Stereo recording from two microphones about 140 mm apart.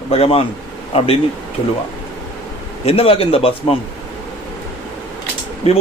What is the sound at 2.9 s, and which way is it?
Speech, 45° left (ahead or behind).